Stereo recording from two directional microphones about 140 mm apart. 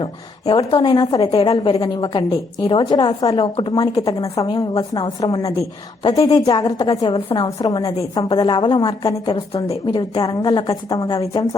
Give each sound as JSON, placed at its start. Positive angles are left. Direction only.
{"t": 0.0, "sound": "a woman's voice", "side_deg": 35}
{"t": 1.2, "sound": "a woman's voice", "side_deg": 40}
{"t": 9.2, "sound": "speech", "side_deg": 40}
{"t": 9.8, "sound": "a woman's voice", "side_deg": 30}